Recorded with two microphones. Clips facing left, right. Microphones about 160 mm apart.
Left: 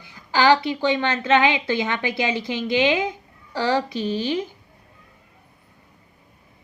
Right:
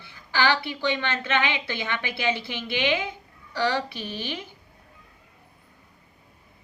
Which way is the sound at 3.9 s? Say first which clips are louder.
Left 10 dB; 15° left (ahead or behind).